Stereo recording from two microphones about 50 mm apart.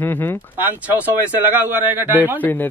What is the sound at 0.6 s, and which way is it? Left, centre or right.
Speech, right.